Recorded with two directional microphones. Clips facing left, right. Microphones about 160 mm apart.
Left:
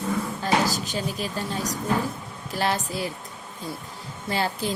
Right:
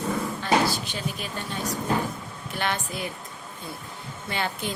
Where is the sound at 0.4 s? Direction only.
40° left (ahead or behind).